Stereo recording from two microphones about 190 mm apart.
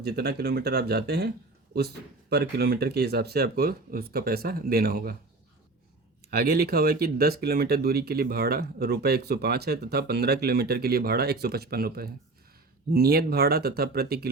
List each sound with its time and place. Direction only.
0.0 s speech: 55° right (ahead or behind)
2.3 s speech: 55° right (ahead or behind)
6.3 s speech: 55° right (ahead or behind)